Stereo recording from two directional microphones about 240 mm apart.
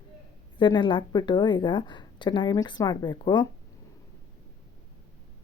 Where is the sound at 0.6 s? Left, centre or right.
Centre.